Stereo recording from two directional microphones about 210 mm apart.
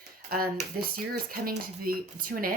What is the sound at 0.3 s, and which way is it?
Speech, 45° right (ahead or behind).